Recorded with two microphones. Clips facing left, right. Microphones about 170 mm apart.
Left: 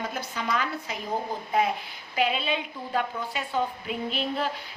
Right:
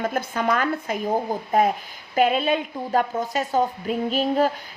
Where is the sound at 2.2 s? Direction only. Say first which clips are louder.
Right 7 dB; 45° right (ahead or behind).